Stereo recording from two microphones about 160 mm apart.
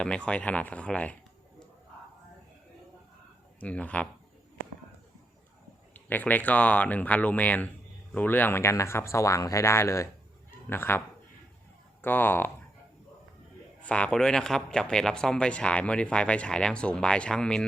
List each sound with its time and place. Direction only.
0.0 s speech: 5° left (ahead or behind)
3.6 s speech: 10° left (ahead or behind)
5.9 s speech: 10° left (ahead or behind)
12.0 s speech: 10° left (ahead or behind)
13.8 s speech: 5° left (ahead or behind)